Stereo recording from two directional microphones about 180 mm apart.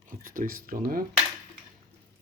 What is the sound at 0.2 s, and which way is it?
Speech, 50° right (ahead or behind).